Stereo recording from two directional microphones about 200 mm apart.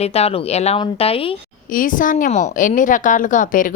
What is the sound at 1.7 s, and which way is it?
Speech, 45° left (ahead or behind).